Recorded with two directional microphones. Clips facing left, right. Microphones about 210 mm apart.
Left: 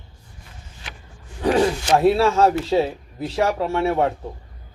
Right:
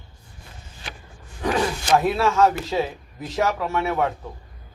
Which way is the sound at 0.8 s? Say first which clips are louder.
Right 2 dB; 35° right (ahead or behind).